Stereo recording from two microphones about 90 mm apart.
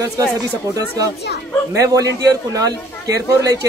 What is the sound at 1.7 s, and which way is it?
Speech, 40° right (ahead or behind).